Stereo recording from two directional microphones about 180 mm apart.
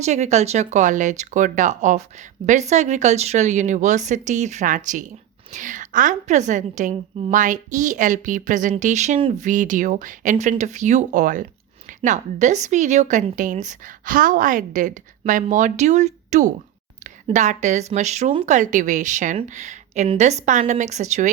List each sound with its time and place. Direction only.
0.0 s a woman's voice: 40° right (ahead or behind)